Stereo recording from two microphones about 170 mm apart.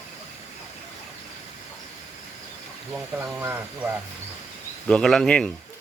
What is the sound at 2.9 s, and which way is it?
Speech, 10° right (ahead or behind).